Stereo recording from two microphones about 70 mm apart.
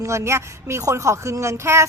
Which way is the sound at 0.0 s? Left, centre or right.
Right.